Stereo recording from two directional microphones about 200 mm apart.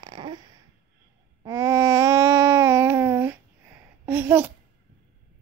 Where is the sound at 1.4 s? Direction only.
15° right (ahead or behind).